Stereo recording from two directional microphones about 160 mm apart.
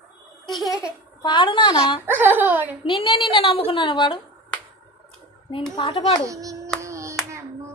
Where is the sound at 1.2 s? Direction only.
30° left (ahead or behind).